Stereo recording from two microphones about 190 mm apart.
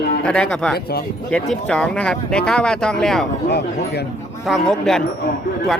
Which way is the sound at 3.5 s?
60° left (ahead or behind).